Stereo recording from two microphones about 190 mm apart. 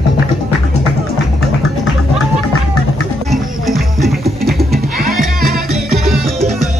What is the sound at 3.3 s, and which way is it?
Music, centre (ahead or behind).